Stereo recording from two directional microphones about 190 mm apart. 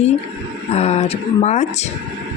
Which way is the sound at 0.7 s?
35° left (ahead or behind).